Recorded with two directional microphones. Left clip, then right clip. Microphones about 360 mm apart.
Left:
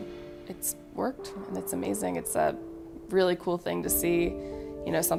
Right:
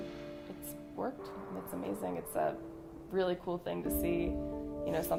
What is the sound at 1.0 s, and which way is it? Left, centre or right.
Speech, left.